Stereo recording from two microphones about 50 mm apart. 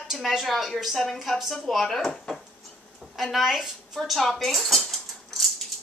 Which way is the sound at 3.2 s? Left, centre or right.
Centre.